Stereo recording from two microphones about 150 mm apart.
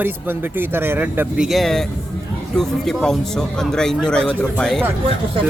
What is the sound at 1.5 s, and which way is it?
Speech, centre (ahead or behind).